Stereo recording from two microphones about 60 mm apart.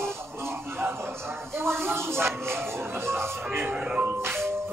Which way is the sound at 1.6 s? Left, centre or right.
Right.